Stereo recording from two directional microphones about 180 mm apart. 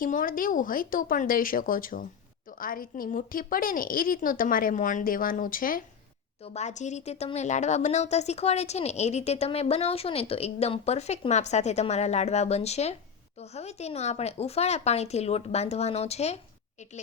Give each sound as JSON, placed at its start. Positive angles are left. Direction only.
{"t": 0.0, "sound": "a woman's voice", "side_deg": 50}
{"t": 6.4, "sound": "speech", "side_deg": 35}